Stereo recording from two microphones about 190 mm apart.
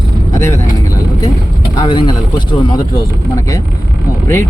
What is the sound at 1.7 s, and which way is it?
Speech, 20° left (ahead or behind).